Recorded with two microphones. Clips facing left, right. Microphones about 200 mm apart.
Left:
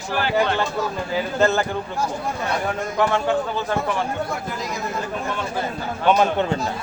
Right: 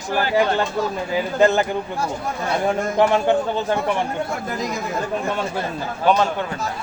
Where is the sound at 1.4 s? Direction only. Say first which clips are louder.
Right 3 dB; 15° right (ahead or behind).